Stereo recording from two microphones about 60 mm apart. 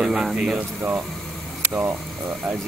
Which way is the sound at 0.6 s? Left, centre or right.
Right.